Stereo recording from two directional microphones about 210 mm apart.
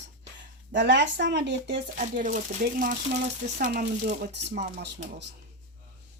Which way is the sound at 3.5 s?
40° right (ahead or behind).